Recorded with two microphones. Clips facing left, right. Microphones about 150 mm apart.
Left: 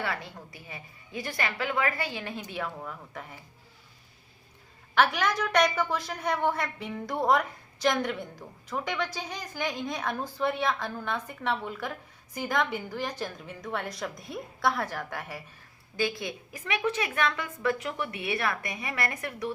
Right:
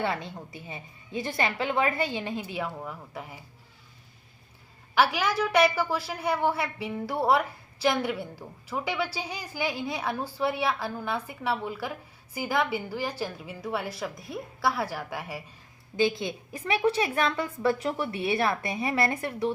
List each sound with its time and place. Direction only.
0.0 s a woman's voice: 20° right (ahead or behind)
4.9 s a woman's voice: 10° right (ahead or behind)
16.0 s a woman's voice: 20° right (ahead or behind)